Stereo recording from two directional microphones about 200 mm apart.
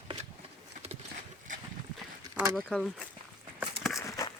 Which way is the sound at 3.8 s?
Centre (ahead or behind).